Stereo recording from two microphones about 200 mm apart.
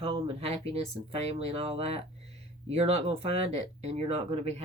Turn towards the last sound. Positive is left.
turn(degrees=-30)  # may be behind; listen again after turning